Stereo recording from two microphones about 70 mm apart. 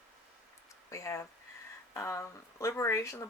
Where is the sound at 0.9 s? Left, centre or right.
Left.